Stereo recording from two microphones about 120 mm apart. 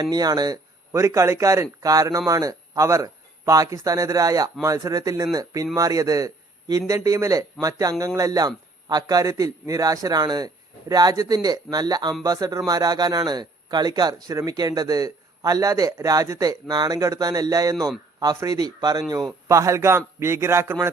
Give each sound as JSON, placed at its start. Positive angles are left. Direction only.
{"t": 0.0, "sound": "a man's voice", "side_deg": -35}